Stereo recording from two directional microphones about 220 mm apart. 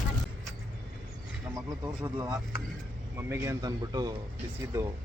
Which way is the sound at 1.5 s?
10° right (ahead or behind).